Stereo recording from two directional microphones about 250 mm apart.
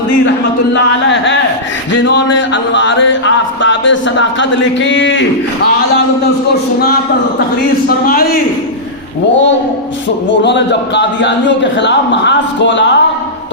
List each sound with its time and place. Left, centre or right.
0.7 s music: left
7.9 s speech: left
10.2 s music: left